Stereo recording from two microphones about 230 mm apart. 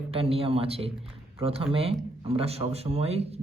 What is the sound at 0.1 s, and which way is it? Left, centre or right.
Speech, right.